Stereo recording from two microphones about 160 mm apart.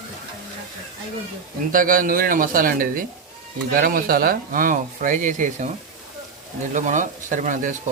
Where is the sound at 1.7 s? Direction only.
60° right (ahead or behind).